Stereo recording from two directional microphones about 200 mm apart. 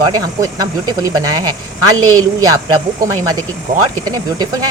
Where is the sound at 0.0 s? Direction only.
15° right (ahead or behind).